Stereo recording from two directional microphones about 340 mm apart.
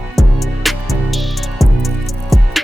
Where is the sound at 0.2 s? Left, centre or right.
Centre.